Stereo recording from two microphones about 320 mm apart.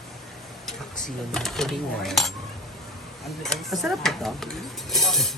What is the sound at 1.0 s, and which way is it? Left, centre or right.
Speech, centre.